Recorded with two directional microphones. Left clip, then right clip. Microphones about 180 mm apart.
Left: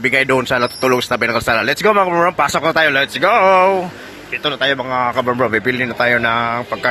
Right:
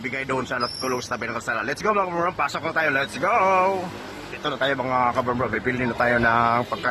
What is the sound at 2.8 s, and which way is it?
Speech, 10° left (ahead or behind).